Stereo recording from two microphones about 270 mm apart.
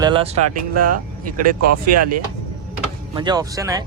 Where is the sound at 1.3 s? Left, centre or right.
Right.